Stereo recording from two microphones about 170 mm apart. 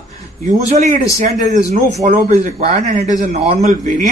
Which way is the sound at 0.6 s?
45° right (ahead or behind).